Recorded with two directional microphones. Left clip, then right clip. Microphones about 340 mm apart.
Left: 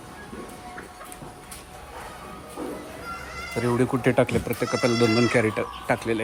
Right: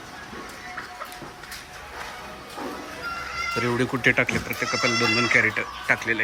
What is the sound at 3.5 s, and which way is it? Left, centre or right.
Speech, centre.